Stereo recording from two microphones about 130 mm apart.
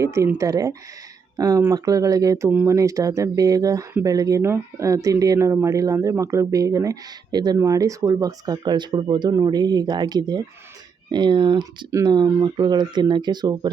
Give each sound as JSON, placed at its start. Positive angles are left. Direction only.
{"t": 0.0, "sound": "speech", "side_deg": -25}